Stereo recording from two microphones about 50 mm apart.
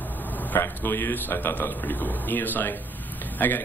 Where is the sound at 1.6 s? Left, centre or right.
Left.